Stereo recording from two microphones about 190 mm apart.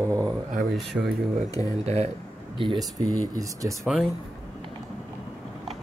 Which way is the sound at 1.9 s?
35° right (ahead or behind).